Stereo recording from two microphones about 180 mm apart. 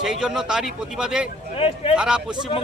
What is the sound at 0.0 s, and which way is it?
Speech, 5° right (ahead or behind).